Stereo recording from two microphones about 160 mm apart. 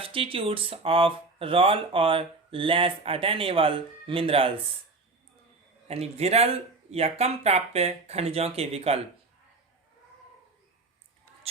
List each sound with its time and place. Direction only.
0.0 s speech: 35° right (ahead or behind)
5.9 s speech: 40° right (ahead or behind)